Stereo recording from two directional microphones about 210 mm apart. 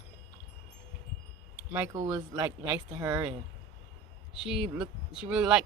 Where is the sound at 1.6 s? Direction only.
10° right (ahead or behind).